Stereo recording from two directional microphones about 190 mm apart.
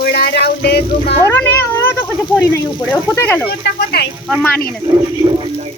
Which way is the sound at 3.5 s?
60° left (ahead or behind).